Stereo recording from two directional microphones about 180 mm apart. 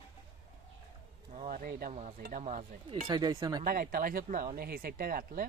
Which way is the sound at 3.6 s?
55° right (ahead or behind).